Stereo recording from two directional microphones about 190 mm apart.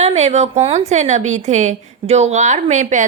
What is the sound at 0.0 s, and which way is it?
A woman's voice, 35° right (ahead or behind).